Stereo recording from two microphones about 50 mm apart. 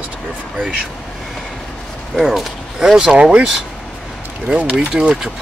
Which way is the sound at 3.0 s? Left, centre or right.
Centre.